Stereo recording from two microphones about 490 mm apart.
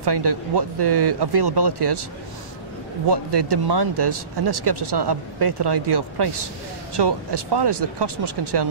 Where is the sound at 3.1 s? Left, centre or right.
Right.